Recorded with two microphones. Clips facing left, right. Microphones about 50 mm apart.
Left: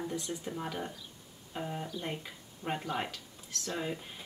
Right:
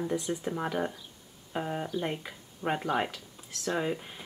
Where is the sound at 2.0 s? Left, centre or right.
Centre.